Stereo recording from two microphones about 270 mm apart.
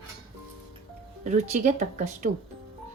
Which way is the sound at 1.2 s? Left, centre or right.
Right.